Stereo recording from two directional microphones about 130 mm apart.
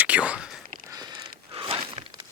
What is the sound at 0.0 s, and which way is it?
Whispering, 10° right (ahead or behind).